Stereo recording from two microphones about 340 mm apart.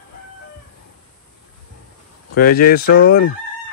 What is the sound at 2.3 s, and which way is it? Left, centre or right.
Speech, left.